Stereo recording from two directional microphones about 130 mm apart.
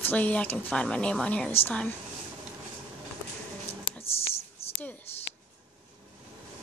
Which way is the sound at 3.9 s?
50° left (ahead or behind).